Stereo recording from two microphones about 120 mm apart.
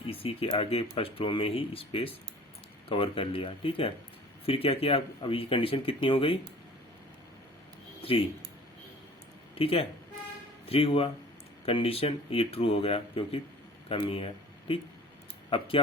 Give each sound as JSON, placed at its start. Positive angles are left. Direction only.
{"t": 0.1, "sound": "speech", "side_deg": 55}
{"t": 9.6, "sound": "speech", "side_deg": 50}
{"t": 15.4, "sound": "speech", "side_deg": 50}